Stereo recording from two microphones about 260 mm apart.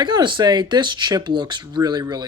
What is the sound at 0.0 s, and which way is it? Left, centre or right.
Speech, centre.